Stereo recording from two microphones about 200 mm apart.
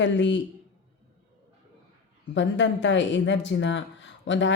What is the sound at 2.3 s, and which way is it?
Speech, 65° left (ahead or behind).